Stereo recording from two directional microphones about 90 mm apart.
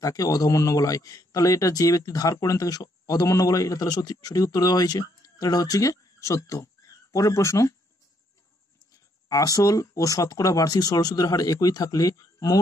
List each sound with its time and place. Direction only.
0.0 s a man's voice: 40° left (ahead or behind)
8.9 s a man's voice: 40° left (ahead or behind)